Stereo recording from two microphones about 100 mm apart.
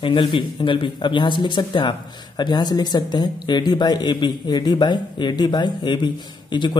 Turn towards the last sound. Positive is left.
turn(degrees=50)  # may be behind; listen again after turning